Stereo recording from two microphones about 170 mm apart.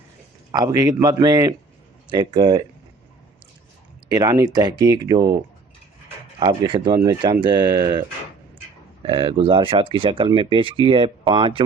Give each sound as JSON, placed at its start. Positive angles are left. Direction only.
{"t": 0.5, "sound": "speech", "side_deg": -20}
{"t": 4.1, "sound": "speech", "side_deg": -20}
{"t": 6.4, "sound": "speech", "side_deg": -25}
{"t": 9.0, "sound": "speech", "side_deg": -30}